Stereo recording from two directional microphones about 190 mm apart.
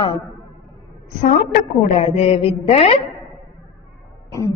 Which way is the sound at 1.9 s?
35° left (ahead or behind).